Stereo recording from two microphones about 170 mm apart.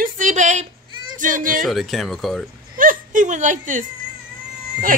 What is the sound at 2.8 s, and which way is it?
Whimper, 50° right (ahead or behind).